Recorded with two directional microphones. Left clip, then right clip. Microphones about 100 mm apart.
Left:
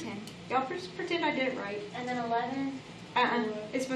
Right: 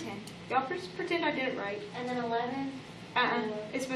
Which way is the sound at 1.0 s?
40° left (ahead or behind).